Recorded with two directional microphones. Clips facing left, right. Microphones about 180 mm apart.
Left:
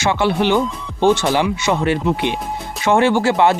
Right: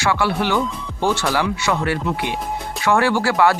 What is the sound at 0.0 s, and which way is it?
Speech, 20° left (ahead or behind).